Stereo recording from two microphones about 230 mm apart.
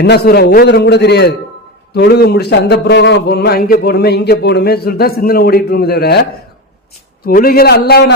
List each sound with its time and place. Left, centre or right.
0.0 s a man's voice: left
7.3 s a man's voice: left